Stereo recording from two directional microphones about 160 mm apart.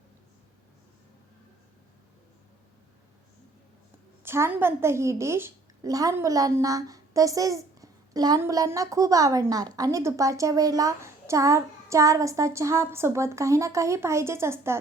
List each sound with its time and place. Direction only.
4.2 s a woman's voice: 15° right (ahead or behind)